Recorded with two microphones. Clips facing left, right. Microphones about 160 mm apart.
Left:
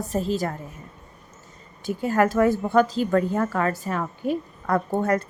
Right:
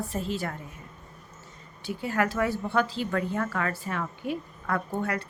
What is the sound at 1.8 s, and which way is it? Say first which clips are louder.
A woman's voice: left 6 dB; 45° left (ahead or behind).